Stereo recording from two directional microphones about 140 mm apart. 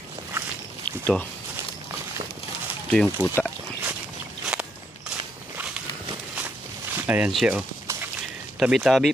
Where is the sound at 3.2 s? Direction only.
15° right (ahead or behind).